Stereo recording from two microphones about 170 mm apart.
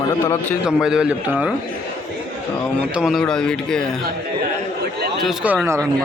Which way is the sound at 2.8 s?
5° right (ahead or behind).